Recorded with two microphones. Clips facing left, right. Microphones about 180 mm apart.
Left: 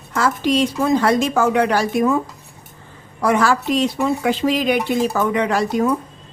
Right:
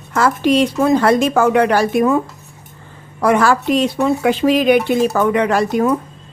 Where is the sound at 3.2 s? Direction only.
60° right (ahead or behind).